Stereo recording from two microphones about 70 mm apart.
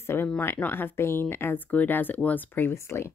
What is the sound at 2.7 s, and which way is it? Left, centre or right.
Speech, left.